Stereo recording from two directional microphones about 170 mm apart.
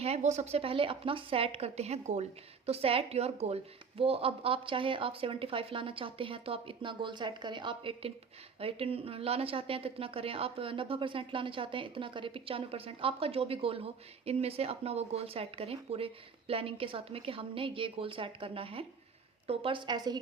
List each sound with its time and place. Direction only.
0.0 s a woman's voice: 40° right (ahead or behind)